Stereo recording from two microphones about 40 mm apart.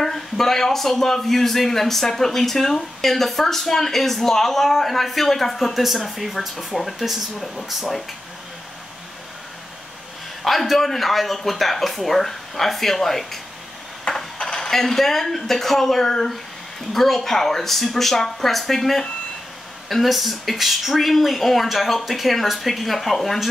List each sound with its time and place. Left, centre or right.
0.0 s a man's voice: centre
10.4 s speech: centre
14.0 s speech: centre